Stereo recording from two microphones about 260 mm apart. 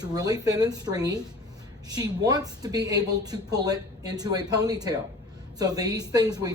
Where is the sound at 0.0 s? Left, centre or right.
Centre.